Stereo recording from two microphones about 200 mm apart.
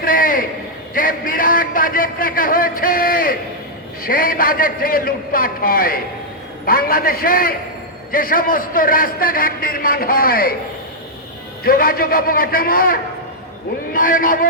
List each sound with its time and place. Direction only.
0.0 s a sound: 45° left (ahead or behind)
0.9 s a man's voice: 45° left (ahead or behind)
11.6 s a man's voice: 45° left (ahead or behind)